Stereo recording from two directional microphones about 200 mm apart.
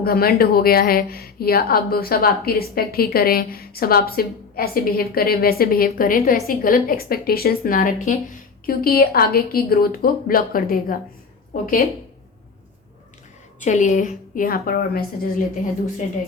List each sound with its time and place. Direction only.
0.0 s a woman's voice: 50° left (ahead or behind)
13.7 s a woman's voice: 35° left (ahead or behind)